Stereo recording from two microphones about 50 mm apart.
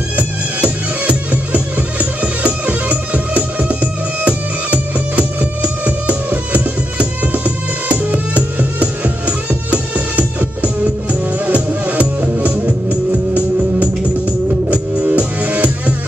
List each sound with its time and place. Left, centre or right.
0.1 s music: right